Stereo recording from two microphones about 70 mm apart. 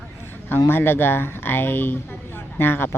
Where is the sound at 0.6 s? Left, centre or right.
Left.